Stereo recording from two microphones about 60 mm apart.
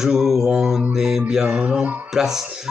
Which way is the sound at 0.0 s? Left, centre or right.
Centre.